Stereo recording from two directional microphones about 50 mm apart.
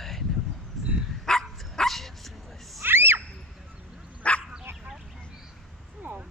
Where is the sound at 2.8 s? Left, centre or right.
Right.